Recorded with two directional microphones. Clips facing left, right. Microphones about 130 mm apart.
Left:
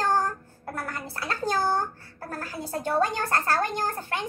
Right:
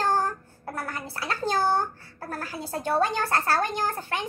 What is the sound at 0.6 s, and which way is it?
Speech, 15° right (ahead or behind).